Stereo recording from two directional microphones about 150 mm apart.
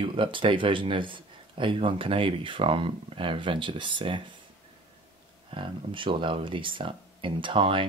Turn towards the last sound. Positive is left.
turn(degrees=-35)  # may be behind; listen again after turning